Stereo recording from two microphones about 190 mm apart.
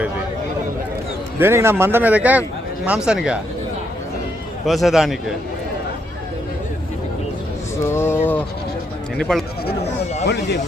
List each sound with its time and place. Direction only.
1.4 s speech: 15° right (ahead or behind)
4.6 s speech: centre (ahead or behind)
7.9 s speech: 10° left (ahead or behind)
10.2 s speech: 60° left (ahead or behind)